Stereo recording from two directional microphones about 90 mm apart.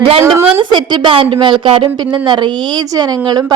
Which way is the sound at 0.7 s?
65° right (ahead or behind).